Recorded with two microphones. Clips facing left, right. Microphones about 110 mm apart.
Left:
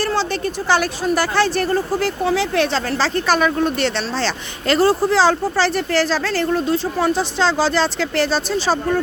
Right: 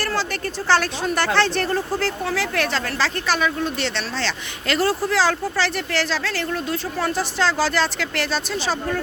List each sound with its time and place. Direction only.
0.0 s a sound: 25° left (ahead or behind)
0.7 s speech: 10° left (ahead or behind); by 3.1 s 25° left (ahead or behind)
3.2 s speech: 45° left (ahead or behind)
4.7 s speech: 30° left (ahead or behind)
7.0 s speech: 20° left (ahead or behind)